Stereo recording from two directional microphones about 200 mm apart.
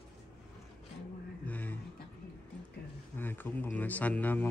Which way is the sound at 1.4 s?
10° left (ahead or behind).